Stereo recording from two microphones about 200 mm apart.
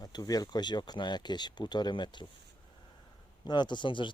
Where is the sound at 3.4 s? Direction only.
20° left (ahead or behind).